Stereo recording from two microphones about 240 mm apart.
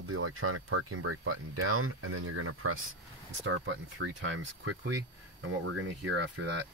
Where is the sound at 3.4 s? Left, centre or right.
Right.